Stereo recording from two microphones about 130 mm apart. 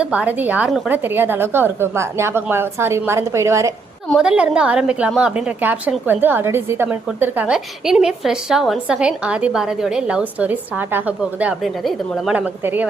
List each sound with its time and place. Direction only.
0.0 s a woman's voice: 10° right (ahead or behind)
4.2 s a woman's voice: 5° right (ahead or behind)
11.8 s a woman's voice: centre (ahead or behind)
12.3 s a woman's voice: 10° right (ahead or behind)